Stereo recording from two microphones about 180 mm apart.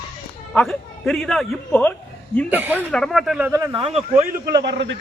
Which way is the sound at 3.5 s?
15° right (ahead or behind).